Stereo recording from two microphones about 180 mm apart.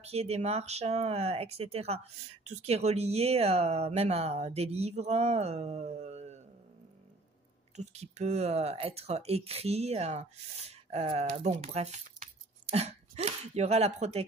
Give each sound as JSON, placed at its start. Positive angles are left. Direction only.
{"t": 0.0, "sound": "speech", "side_deg": -35}
{"t": 7.7, "sound": "speech", "side_deg": -40}